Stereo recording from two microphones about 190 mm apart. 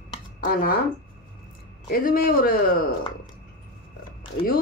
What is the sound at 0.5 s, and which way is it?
Speech, 50° left (ahead or behind).